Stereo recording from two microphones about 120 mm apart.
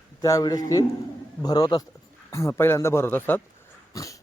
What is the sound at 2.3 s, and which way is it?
A man's voice, 20° left (ahead or behind).